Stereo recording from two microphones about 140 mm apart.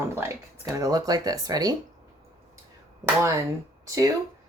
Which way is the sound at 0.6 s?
25° right (ahead or behind).